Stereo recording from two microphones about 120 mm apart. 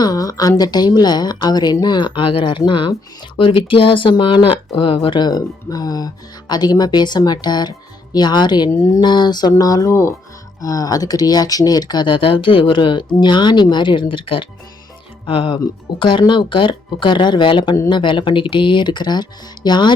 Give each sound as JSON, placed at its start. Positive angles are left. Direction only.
{"t": 0.0, "sound": "speech", "side_deg": 30}
{"t": 8.7, "sound": "speech", "side_deg": 25}
{"t": 9.0, "sound": "speech", "side_deg": 40}